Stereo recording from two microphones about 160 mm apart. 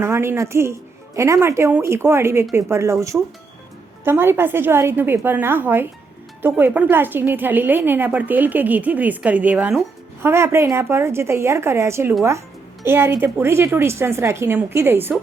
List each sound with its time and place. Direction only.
0.0 s speech: 15° right (ahead or behind)